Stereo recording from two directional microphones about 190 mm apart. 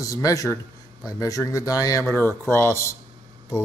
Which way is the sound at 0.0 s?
15° left (ahead or behind).